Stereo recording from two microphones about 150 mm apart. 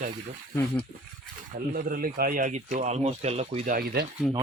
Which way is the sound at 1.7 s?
70° right (ahead or behind).